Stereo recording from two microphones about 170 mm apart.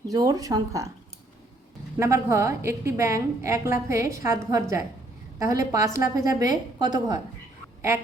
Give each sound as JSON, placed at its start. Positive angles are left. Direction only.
{"t": 0.1, "sound": "a woman's voice", "side_deg": -20}
{"t": 2.0, "sound": "a woman's voice", "side_deg": -15}